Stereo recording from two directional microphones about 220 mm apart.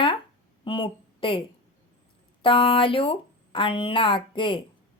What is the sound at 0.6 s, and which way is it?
A woman's voice, 25° left (ahead or behind).